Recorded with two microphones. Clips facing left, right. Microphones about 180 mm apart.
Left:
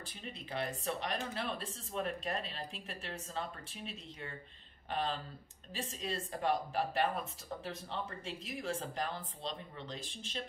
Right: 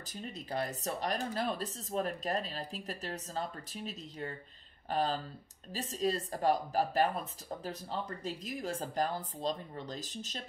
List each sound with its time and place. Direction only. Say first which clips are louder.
0.1 s speech: right 5 dB; 40° right (ahead or behind)